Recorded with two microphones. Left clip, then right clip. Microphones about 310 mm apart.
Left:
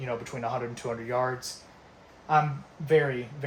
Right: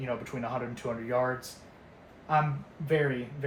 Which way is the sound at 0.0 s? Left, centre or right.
Left.